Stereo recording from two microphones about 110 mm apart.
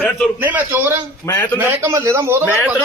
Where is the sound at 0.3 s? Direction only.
15° right (ahead or behind).